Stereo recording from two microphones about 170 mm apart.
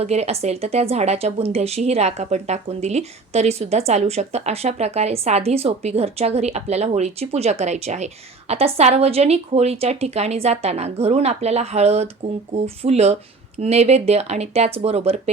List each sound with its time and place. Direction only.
0.0 s speech: 40° right (ahead or behind)